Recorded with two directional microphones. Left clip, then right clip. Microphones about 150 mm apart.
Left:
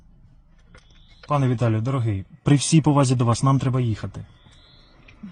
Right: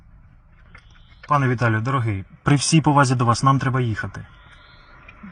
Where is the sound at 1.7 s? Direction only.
35° left (ahead or behind).